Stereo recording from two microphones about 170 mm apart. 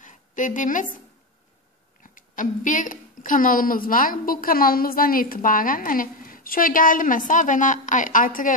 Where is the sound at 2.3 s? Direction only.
50° left (ahead or behind).